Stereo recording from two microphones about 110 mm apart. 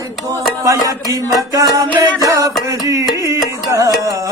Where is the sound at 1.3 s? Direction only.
35° right (ahead or behind).